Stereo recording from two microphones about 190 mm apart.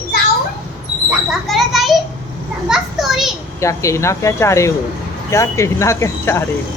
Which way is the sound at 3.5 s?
15° left (ahead or behind).